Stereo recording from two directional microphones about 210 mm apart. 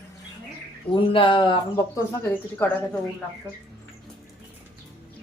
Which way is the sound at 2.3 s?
10° left (ahead or behind).